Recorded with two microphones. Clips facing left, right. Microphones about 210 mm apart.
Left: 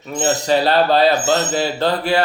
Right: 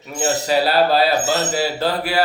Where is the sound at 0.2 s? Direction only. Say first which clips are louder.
Left 1 dB; 5° right (ahead or behind).